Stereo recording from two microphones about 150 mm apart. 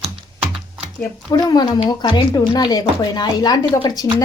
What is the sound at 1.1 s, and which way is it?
Speech, 20° left (ahead or behind).